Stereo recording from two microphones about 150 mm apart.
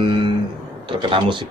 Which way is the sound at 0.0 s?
35° right (ahead or behind).